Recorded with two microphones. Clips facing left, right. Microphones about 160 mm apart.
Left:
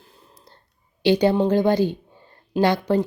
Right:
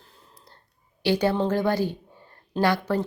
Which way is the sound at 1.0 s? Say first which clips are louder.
Left 5 dB; 20° left (ahead or behind).